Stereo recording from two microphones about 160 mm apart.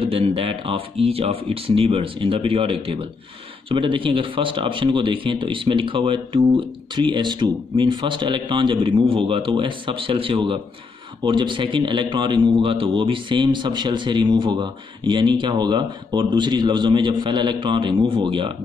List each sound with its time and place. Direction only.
0.0 s a man's voice: 35° right (ahead or behind)